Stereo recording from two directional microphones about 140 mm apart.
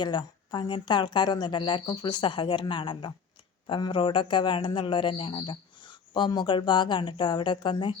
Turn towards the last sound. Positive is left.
turn(degrees=35)  # may be behind; listen again after turning